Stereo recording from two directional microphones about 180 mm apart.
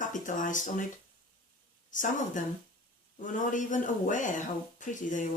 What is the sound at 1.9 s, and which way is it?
Speech, 45° left (ahead or behind).